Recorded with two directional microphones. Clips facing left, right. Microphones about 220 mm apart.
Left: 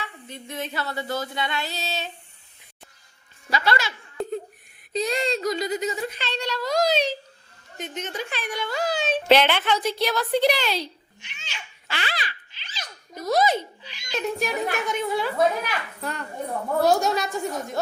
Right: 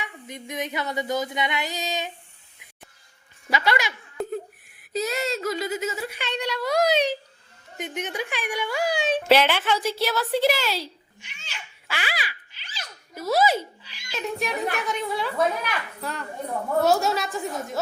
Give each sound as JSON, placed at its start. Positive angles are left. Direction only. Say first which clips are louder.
{"t": 0.0, "sound": "a child's voice", "louder": "right 1 dB", "side_deg": -15}
{"t": 3.5, "sound": "a woman's voice", "louder": "even", "side_deg": -15}